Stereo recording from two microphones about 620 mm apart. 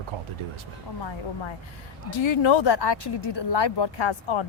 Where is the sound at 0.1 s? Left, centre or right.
Right.